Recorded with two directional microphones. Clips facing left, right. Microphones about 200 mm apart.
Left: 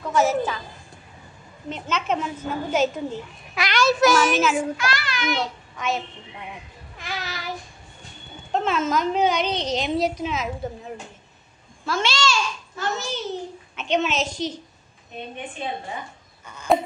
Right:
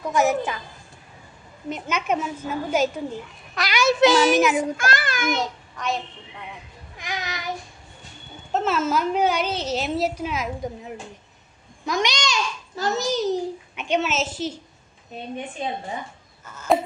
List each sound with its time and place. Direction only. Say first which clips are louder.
0.0 s a woman's voice: even; 15° right (ahead or behind)
1.7 s a woman's voice: right 1 dB; 10° right (ahead or behind)
4.0 s a child's voice: right 4 dB; 20° right (ahead or behind)
4.7 s a child's voice: right 2 dB; 50° right (ahead or behind)
5.8 s a woman's voice: left 1 dB; centre (ahead or behind)
7.0 s child singing: right 1 dB; 15° right (ahead or behind)
8.5 s a woman's voice: even; 5° right (ahead or behind)
11.8 s a child's voice: even; 15° right (ahead or behind)
12.7 s a child's voice: right 5 dB; 40° right (ahead or behind)
13.7 s a woman's voice: left 1 dB; 10° right (ahead or behind)
16.4 s a sound: even; 5° right (ahead or behind)